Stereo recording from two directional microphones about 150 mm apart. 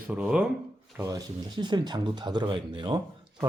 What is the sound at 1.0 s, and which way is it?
Speech, 25° right (ahead or behind).